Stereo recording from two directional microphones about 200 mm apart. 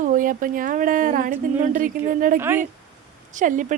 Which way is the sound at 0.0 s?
40° right (ahead or behind).